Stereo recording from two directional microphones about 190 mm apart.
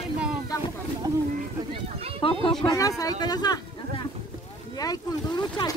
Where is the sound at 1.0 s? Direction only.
20° right (ahead or behind).